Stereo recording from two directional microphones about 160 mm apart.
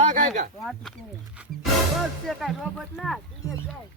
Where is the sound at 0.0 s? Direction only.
50° right (ahead or behind).